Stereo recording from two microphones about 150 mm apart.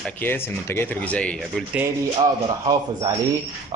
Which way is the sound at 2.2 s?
30° right (ahead or behind).